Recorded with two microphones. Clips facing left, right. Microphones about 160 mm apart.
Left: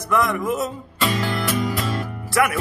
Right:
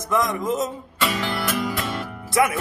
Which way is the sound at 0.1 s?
20° right (ahead or behind).